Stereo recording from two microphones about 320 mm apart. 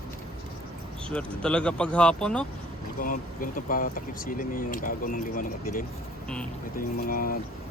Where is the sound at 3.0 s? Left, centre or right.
Left.